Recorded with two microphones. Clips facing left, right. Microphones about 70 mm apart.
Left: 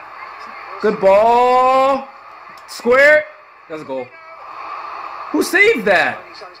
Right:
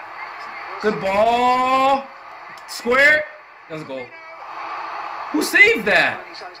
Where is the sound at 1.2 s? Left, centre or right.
Left.